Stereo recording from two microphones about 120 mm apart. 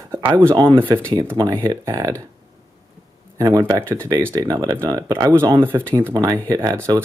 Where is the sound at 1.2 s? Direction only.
20° right (ahead or behind).